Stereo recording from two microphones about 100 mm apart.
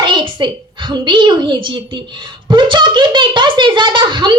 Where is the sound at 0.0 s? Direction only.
55° right (ahead or behind).